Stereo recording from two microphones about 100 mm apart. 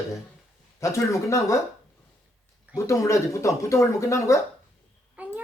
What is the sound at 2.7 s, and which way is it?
Speech, 30° left (ahead or behind).